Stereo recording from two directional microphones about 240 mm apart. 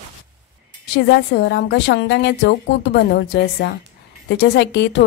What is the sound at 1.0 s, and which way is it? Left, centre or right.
Speech, left.